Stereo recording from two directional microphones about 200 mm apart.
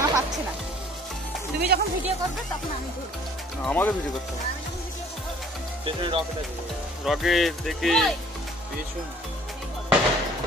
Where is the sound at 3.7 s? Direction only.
10° left (ahead or behind).